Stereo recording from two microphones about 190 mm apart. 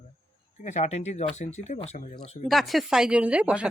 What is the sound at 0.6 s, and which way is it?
Speech, 35° left (ahead or behind).